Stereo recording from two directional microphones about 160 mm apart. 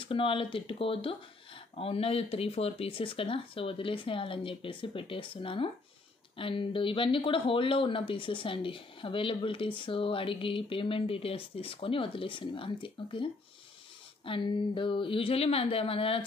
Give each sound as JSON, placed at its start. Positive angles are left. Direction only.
{"t": 0.0, "sound": "speech", "side_deg": 35}